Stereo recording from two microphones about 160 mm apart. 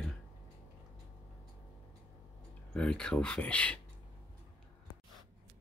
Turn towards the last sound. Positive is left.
turn(degrees=10)  # may be behind; listen again after turning